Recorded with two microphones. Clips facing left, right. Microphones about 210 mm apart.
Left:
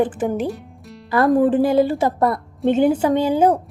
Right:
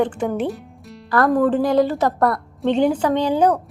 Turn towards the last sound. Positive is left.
turn(degrees=10)  # may be behind; listen again after turning